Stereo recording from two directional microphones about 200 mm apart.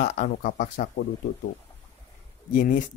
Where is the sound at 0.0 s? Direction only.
40° left (ahead or behind).